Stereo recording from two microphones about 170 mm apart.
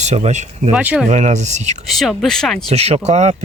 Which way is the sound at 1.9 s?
Centre (ahead or behind).